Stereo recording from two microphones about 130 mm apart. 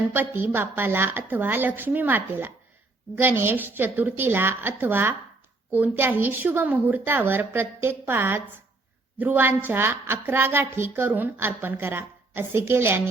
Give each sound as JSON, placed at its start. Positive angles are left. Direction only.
{"t": 0.1, "sound": "a woman's voice", "side_deg": -15}